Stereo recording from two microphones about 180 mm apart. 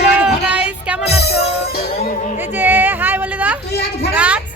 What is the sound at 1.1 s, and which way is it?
Music, 65° left (ahead or behind).